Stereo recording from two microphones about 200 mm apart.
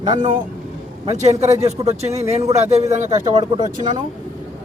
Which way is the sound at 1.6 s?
30° right (ahead or behind).